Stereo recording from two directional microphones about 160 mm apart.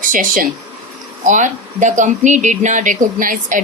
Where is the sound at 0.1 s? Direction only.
60° right (ahead or behind).